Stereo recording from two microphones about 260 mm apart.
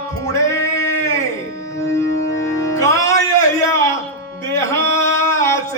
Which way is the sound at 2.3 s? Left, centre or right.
Left.